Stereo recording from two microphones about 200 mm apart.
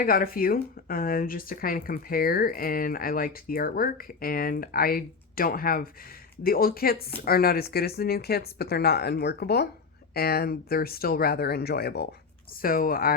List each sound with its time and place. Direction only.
0.0 s speech: 45° left (ahead or behind)